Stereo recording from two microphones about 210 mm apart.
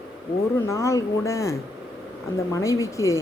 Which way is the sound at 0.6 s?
15° left (ahead or behind).